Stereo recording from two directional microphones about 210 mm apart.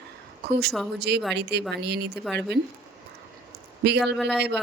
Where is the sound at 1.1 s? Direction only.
50° right (ahead or behind).